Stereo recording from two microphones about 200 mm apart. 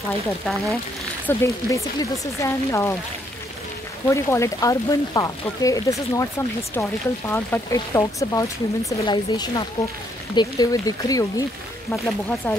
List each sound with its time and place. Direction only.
1.2 s speech: 15° left (ahead or behind)
4.1 s speech: 15° left (ahead or behind)